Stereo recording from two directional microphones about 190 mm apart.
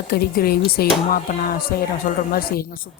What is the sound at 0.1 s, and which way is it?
Speech, 55° left (ahead or behind).